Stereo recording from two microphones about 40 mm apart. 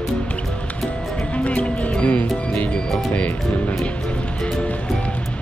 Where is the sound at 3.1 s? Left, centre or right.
Left.